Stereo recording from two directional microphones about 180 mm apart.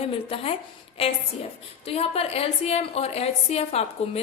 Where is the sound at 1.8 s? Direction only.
35° left (ahead or behind).